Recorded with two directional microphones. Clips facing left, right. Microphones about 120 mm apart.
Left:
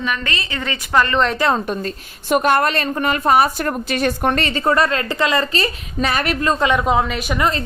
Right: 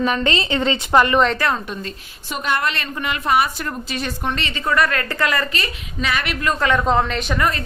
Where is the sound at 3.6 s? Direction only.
55° left (ahead or behind).